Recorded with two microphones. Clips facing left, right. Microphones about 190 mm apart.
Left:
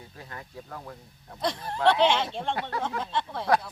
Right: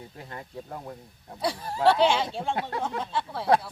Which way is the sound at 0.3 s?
25° right (ahead or behind).